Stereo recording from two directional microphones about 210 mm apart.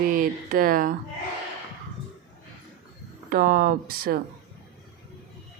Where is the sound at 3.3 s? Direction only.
45° right (ahead or behind).